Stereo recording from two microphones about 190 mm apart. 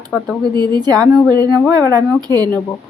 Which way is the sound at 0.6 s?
20° right (ahead or behind).